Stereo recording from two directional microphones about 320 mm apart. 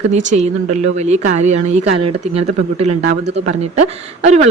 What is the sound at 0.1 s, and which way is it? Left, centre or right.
Speech, right.